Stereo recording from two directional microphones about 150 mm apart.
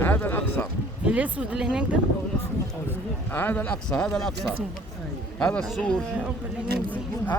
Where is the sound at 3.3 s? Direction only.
10° left (ahead or behind).